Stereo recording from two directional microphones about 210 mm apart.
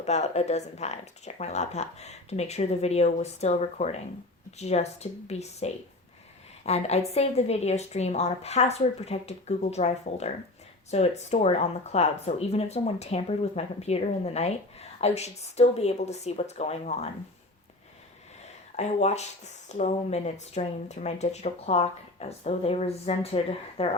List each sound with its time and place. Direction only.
0.0 s speech: 30° left (ahead or behind)
18.8 s speech: 30° left (ahead or behind)